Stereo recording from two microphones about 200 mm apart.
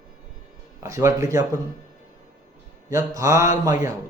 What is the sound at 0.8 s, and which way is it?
Speech, 15° right (ahead or behind).